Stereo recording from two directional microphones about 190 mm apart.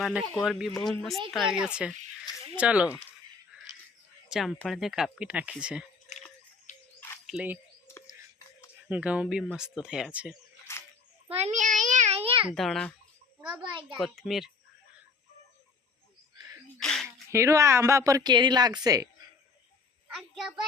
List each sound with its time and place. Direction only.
0.0 s speech: centre (ahead or behind)
4.3 s speech: centre (ahead or behind)
6.7 s music: 40° left (ahead or behind)
7.3 s speech: 5° right (ahead or behind)
8.9 s speech: 5° right (ahead or behind)
10.7 s a sound: 15° left (ahead or behind)
11.3 s a sound: 35° right (ahead or behind)
12.5 s speech: centre (ahead or behind)
13.6 s speech: 25° right (ahead or behind)
14.0 s speech: centre (ahead or behind)
16.8 s a sound: 5° left (ahead or behind)
17.3 s speech: 15° right (ahead or behind)
20.1 s a sound: centre (ahead or behind)